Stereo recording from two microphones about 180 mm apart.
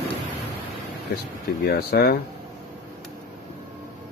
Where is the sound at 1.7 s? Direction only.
60° left (ahead or behind).